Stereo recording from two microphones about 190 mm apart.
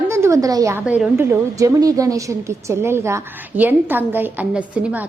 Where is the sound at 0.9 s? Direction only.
5° right (ahead or behind).